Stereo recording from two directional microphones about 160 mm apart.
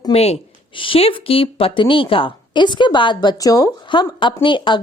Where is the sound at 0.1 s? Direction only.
40° left (ahead or behind).